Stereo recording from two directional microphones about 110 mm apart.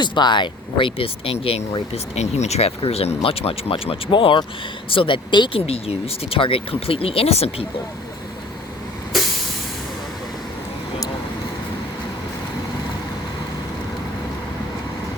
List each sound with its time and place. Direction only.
0.0 s speech: 45° left (ahead or behind)
5.6 s speech: 60° left (ahead or behind)